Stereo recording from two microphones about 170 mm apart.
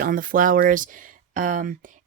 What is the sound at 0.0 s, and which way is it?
Speech, 55° right (ahead or behind).